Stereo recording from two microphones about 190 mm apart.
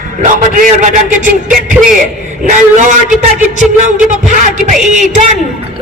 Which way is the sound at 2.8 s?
40° right (ahead or behind).